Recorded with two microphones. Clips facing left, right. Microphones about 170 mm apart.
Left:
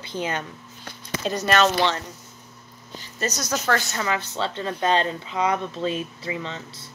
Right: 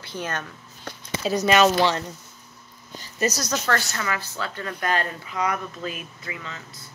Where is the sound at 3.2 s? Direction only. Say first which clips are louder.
Right 3 dB; 10° right (ahead or behind).